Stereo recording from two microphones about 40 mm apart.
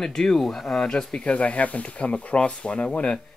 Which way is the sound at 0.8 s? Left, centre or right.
Centre.